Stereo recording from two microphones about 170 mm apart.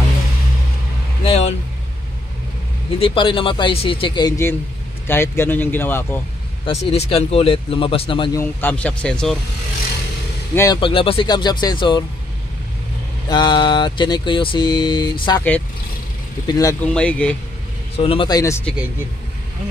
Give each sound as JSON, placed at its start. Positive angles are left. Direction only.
{"t": 1.2, "sound": "vehicle", "side_deg": 35}
{"t": 3.0, "sound": "speech", "side_deg": 30}
{"t": 6.6, "sound": "speech", "side_deg": 35}
{"t": 8.4, "sound": "speech", "side_deg": 10}
{"t": 10.5, "sound": "speech", "side_deg": 15}
{"t": 10.8, "sound": "speech", "side_deg": 30}
{"t": 13.3, "sound": "speech", "side_deg": 25}
{"t": 16.4, "sound": "speech", "side_deg": 20}
{"t": 16.8, "sound": "speech", "side_deg": 5}
{"t": 17.9, "sound": "speech", "side_deg": 30}